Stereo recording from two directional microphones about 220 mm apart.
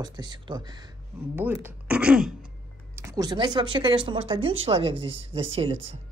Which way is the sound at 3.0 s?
15° right (ahead or behind).